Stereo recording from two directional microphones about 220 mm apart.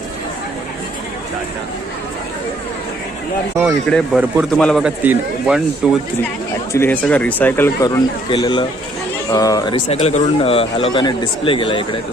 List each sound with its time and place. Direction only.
3.8 s a man's voice: centre (ahead or behind)
6.7 s speech: 10° left (ahead or behind); by 11.9 s 25° left (ahead or behind)